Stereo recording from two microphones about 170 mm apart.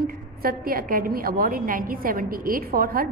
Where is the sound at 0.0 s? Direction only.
60° right (ahead or behind).